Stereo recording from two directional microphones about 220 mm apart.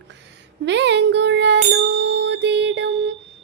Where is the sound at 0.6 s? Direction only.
55° right (ahead or behind).